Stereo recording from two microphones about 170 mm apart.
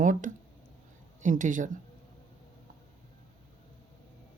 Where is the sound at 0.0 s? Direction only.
50° right (ahead or behind).